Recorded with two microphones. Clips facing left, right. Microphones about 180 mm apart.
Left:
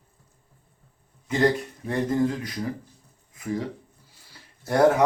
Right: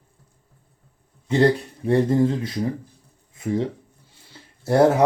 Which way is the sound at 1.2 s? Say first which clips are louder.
Right 4 dB; 30° right (ahead or behind).